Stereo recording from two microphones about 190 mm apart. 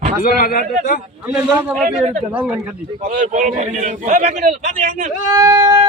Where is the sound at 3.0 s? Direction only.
45° right (ahead or behind).